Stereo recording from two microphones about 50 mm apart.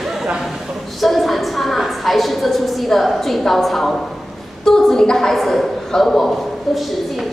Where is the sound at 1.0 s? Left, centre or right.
Centre.